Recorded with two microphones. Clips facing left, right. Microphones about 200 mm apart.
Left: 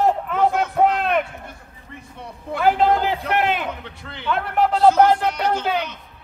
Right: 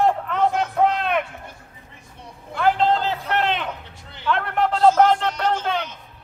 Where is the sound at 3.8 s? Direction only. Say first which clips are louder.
Left 5 dB; 65° left (ahead or behind).